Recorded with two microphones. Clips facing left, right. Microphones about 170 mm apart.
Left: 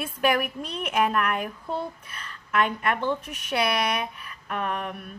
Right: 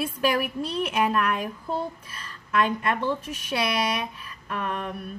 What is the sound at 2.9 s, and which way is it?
Speech, 30° right (ahead or behind).